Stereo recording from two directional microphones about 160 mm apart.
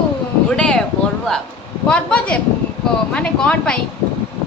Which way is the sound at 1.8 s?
5° left (ahead or behind).